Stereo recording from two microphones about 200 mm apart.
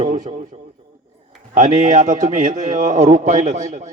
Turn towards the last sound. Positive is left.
turn(degrees=-35)  # may be behind; listen again after turning